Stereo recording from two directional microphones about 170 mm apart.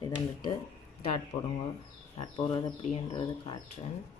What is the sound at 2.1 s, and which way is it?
Speech, 35° left (ahead or behind).